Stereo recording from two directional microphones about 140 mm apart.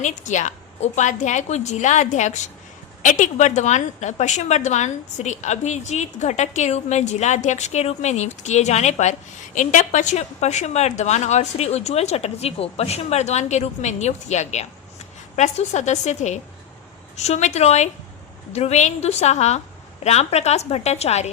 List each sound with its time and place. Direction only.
0.0 s a woman's voice: 60° left (ahead or behind)